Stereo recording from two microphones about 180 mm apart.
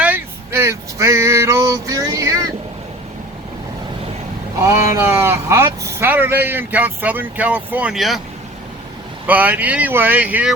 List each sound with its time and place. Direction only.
0.0 s male singing: 10° right (ahead or behind)
4.6 s speech: 15° right (ahead or behind)
9.2 s speech: 10° right (ahead or behind)